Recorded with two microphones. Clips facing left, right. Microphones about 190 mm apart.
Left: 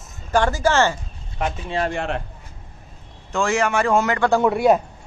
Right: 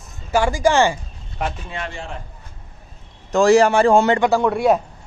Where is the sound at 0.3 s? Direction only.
10° right (ahead or behind).